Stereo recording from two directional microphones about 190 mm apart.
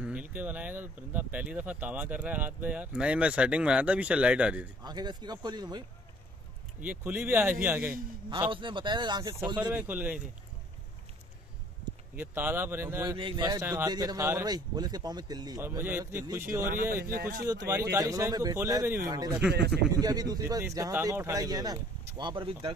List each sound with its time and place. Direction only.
0.0 s speech: 10° right (ahead or behind)
4.8 s speech: 20° right (ahead or behind)
6.8 s speech: 10° right (ahead or behind)
8.5 s speech: 25° right (ahead or behind)
9.6 s speech: 10° right (ahead or behind)
12.2 s speech: 10° right (ahead or behind)
16.9 s speech: 50° right (ahead or behind)
17.9 s speech: 15° right (ahead or behind)